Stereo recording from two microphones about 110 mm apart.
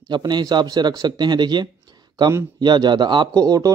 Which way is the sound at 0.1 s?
40° right (ahead or behind).